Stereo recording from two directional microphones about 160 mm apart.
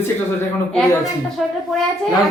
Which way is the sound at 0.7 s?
10° left (ahead or behind).